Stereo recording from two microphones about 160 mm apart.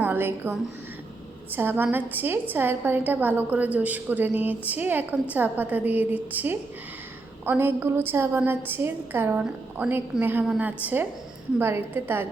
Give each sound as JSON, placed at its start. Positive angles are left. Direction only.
{"t": 0.0, "sound": "a woman's voice", "side_deg": -15}
{"t": 1.5, "sound": "a woman's voice", "side_deg": -10}